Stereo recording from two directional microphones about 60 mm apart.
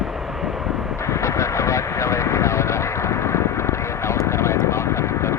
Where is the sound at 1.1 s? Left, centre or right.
Left.